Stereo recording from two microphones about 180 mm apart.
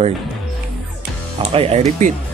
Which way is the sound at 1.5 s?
35° right (ahead or behind).